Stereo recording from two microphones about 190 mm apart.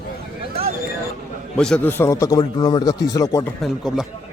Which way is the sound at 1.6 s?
5° left (ahead or behind).